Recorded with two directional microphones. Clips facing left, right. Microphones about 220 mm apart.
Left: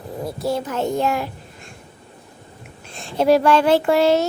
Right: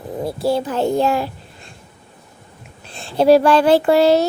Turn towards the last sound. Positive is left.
turn(degrees=-35)  # may be behind; listen again after turning